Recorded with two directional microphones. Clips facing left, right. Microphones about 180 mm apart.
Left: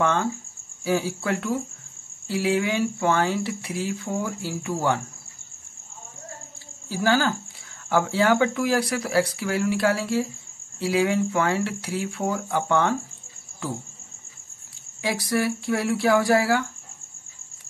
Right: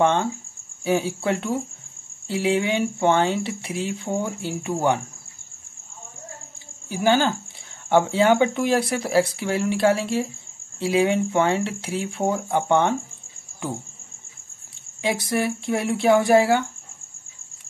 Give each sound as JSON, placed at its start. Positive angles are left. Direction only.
{"t": 0.0, "sound": "speech", "side_deg": -25}
{"t": 6.9, "sound": "speech", "side_deg": -20}
{"t": 15.0, "sound": "speech", "side_deg": -20}